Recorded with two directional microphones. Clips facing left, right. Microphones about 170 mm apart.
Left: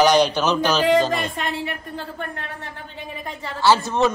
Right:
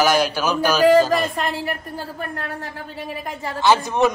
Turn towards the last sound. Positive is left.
turn(degrees=-15)  # may be behind; listen again after turning